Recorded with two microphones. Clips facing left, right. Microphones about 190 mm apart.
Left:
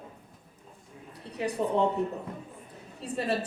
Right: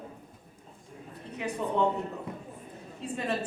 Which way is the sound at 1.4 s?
35° left (ahead or behind).